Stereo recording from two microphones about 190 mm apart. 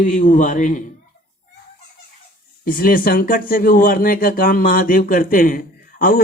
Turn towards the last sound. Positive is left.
turn(degrees=45)  # may be behind; listen again after turning